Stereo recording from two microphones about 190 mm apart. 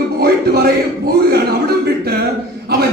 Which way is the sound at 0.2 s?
55° right (ahead or behind).